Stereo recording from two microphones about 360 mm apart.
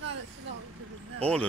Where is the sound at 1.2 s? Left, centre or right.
Centre.